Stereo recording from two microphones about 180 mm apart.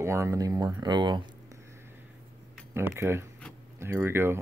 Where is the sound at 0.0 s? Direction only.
15° right (ahead or behind).